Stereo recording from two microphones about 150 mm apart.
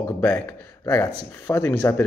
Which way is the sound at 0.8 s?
20° left (ahead or behind).